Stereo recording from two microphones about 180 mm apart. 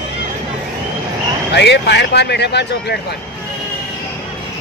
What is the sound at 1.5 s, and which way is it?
Speech, 70° left (ahead or behind).